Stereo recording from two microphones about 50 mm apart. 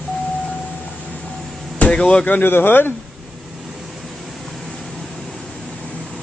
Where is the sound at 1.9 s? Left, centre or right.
Centre.